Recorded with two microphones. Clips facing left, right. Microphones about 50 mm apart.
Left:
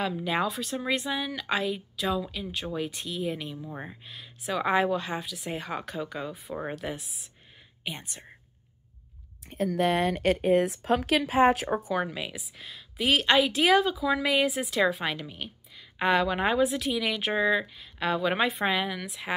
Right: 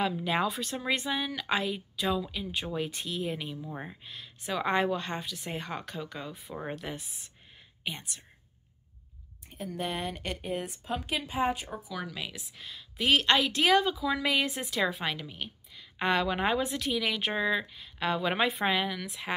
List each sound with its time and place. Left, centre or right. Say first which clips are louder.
0.0 s speech: left 1 dB; centre
8.0 s speech: left 2 dB; left
9.5 s speech: left 9 dB; left
12.1 s speech: left 3 dB; centre